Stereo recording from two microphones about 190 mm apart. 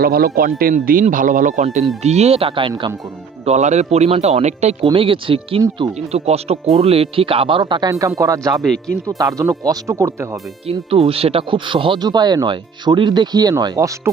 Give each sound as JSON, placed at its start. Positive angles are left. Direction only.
{"t": 0.0, "sound": "speech", "side_deg": -50}
{"t": 3.4, "sound": "speech", "side_deg": -35}
{"t": 10.7, "sound": "speech", "side_deg": -30}